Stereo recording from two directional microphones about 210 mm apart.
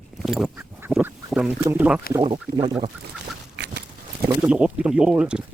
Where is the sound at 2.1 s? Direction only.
20° right (ahead or behind).